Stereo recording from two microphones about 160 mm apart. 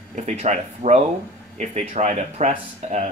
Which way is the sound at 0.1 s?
45° right (ahead or behind).